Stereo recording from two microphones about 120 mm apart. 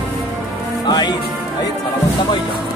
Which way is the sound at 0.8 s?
35° left (ahead or behind).